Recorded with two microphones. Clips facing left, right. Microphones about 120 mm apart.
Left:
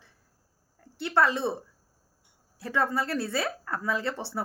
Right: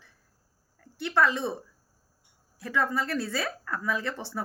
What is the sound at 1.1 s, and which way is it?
Speech, 30° left (ahead or behind).